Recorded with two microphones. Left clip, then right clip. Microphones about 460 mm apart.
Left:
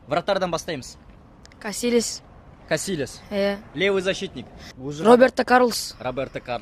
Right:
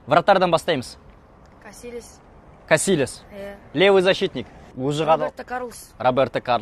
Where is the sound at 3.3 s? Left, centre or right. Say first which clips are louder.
Left 12 dB; left.